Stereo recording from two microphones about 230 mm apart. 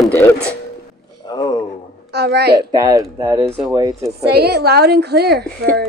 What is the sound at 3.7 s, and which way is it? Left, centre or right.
Speech, centre.